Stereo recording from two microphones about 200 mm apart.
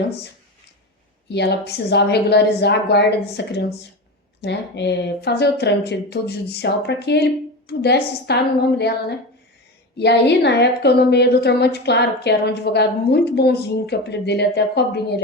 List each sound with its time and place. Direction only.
1.3 s a woman's voice: 55° left (ahead or behind)
10.0 s a woman's voice: 55° left (ahead or behind)